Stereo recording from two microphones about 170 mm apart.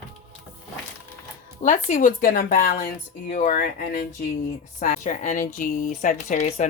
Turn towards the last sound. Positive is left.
turn(degrees=45)  # may be behind; listen again after turning